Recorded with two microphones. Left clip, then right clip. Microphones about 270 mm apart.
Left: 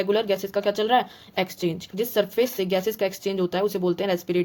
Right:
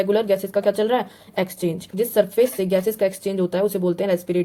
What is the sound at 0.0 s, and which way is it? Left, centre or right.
A woman's voice, centre.